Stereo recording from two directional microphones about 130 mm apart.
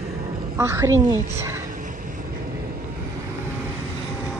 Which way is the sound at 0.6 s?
20° right (ahead or behind).